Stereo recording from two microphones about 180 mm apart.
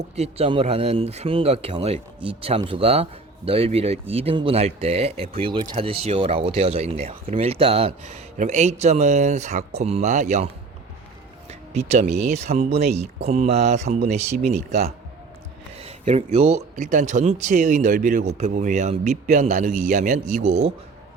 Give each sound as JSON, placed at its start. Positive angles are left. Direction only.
{"t": 0.2, "sound": "speech", "side_deg": -35}
{"t": 11.4, "sound": "a sound", "side_deg": -35}
{"t": 12.5, "sound": "speech", "side_deg": -35}